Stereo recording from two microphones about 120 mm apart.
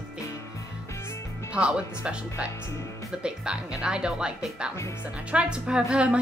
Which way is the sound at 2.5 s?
25° left (ahead or behind).